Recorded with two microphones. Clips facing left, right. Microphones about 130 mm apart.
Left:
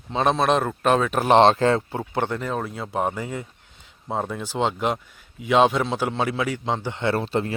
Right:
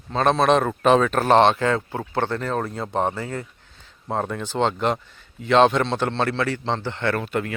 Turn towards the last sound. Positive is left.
turn(degrees=30)  # may be behind; listen again after turning